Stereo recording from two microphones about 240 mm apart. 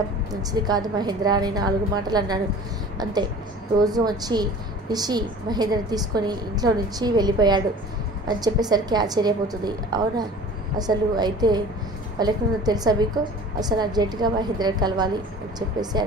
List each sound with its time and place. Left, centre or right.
0.3 s a woman's voice: centre